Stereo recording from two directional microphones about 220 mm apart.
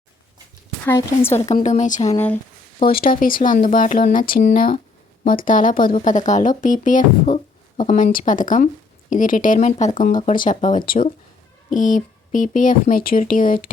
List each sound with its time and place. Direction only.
0.9 s a woman's voice: 10° left (ahead or behind)
1.5 s speech: 35° left (ahead or behind)
2.1 s a woman's voice: 10° left (ahead or behind)
2.8 s speech: 40° left (ahead or behind)